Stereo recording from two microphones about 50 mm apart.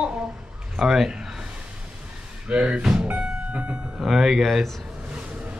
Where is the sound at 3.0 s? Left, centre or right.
Right.